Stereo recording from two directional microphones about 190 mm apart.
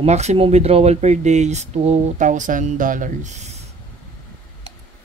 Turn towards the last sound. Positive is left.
turn(degrees=-40)  # may be behind; listen again after turning